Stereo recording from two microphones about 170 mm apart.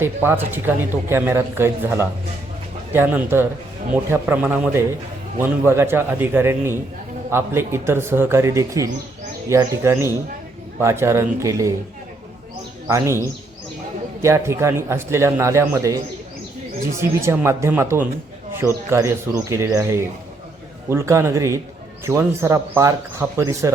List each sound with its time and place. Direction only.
0.0 s a man's voice: 15° right (ahead or behind)
12.9 s a man's voice: 15° right (ahead or behind)
14.2 s a man's voice: 15° right (ahead or behind)
17.0 s a man's voice: 15° right (ahead or behind)